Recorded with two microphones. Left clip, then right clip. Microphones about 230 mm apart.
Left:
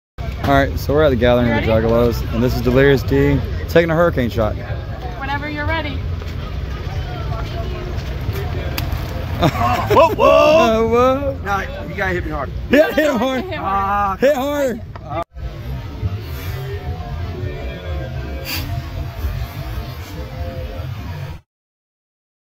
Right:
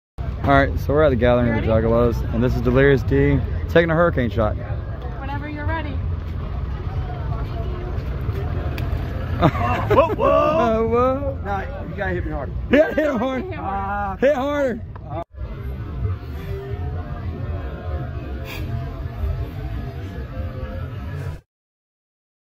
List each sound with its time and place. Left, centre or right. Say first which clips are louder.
0.5 s speech: left 1 dB; centre
5.2 s vehicle: left 8 dB; centre
9.4 s speech: left 3 dB; centre
9.9 s speech: left 6 dB; left
10.6 s speech: left 4 dB; centre
12.0 s speech: left 5 dB; centre
13.7 s speech: left 8 dB; centre
14.2 s speech: right 1 dB; centre